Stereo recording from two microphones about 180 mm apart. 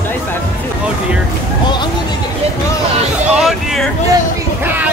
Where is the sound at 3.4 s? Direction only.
Centre (ahead or behind).